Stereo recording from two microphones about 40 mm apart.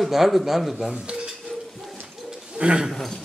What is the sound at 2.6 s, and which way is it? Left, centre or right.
Speech, right.